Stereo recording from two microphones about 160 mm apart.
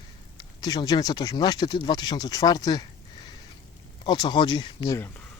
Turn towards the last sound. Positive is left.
turn(degrees=25)  # may be behind; listen again after turning